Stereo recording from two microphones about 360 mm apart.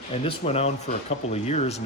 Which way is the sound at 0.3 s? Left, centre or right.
Centre.